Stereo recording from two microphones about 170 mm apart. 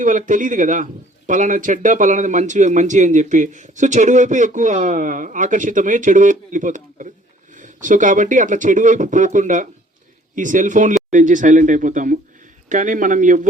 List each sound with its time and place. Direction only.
0.0 s speech: 50° right (ahead or behind)